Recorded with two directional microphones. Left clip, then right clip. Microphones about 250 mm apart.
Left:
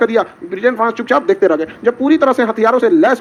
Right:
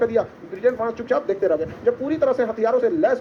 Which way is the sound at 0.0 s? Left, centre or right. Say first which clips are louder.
Left 7 dB; left.